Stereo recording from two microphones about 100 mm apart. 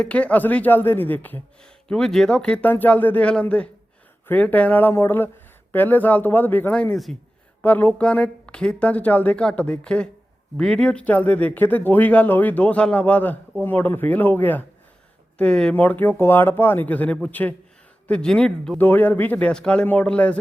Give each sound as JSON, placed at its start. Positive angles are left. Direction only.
{"t": 0.0, "sound": "speech", "side_deg": 10}
{"t": 6.9, "sound": "speech", "side_deg": 5}
{"t": 7.6, "sound": "speech", "side_deg": 15}
{"t": 18.8, "sound": "speech", "side_deg": 20}